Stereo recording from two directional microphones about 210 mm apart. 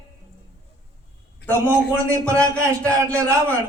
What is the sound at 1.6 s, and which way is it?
Speech, 15° right (ahead or behind).